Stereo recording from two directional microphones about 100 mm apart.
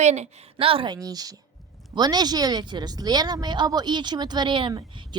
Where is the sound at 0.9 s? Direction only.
40° right (ahead or behind).